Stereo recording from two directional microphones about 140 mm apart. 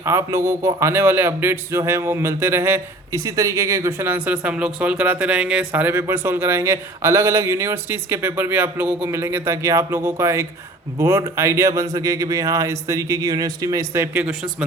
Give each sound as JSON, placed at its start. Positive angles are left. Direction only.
{"t": 0.0, "sound": "a man's voice", "side_deg": -20}